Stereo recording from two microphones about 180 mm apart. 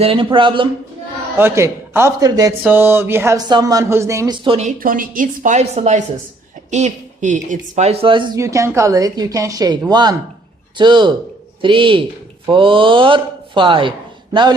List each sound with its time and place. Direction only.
0.0 s speech: 30° right (ahead or behind)
1.4 s speech: 15° right (ahead or behind)
4.4 s speech: 35° right (ahead or behind)
4.8 s speech: 50° right (ahead or behind); by 8.3 s 30° right (ahead or behind)
8.4 s speech: 15° right (ahead or behind)